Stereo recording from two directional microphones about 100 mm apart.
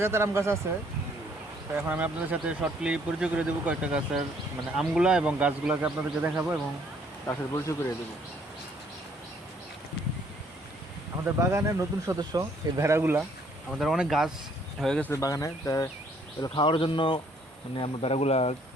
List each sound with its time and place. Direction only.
0.0 s speech: 25° right (ahead or behind)
1.7 s speech: 15° right (ahead or behind)
7.3 s speech: 30° left (ahead or behind)
11.2 s speech: 30° right (ahead or behind)
13.7 s speech: 5° right (ahead or behind)
14.8 s speech: 5° left (ahead or behind)
15.1 s speech: 35° left (ahead or behind)
16.4 s speech: 55° left (ahead or behind)
17.7 s speech: 75° left (ahead or behind)